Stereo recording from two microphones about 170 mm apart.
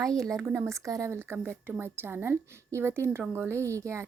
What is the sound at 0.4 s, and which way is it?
A woman's voice, 15° right (ahead or behind).